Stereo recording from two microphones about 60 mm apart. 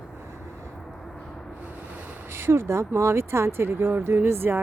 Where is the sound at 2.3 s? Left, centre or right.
Right.